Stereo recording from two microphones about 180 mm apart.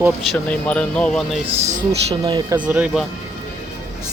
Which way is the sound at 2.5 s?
5° right (ahead or behind).